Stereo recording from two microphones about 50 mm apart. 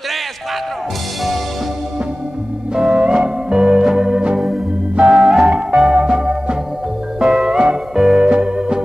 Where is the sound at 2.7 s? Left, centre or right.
Centre.